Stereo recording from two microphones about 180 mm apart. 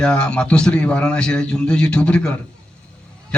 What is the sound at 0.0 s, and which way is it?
A man's voice, 5° left (ahead or behind).